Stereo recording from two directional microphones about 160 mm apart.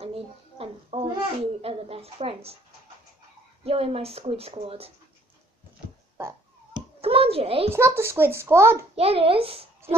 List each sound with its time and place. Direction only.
0.6 s a child's voice: 35° right (ahead or behind)
3.6 s a woman's voice: 35° right (ahead or behind)
6.1 s a sound: 15° right (ahead or behind)
7.0 s hands: 35° right (ahead or behind)
7.7 s a child's voice: 15° right (ahead or behind)
8.9 s a child's voice: 35° right (ahead or behind)